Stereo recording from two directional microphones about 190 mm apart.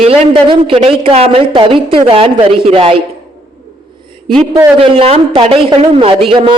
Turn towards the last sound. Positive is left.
turn(degrees=-30)  # may be behind; listen again after turning